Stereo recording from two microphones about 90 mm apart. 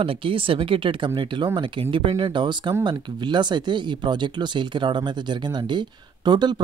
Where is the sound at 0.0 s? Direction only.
85° right.